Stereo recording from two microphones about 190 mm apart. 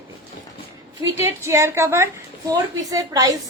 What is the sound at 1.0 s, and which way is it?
A woman's voice, 15° right (ahead or behind).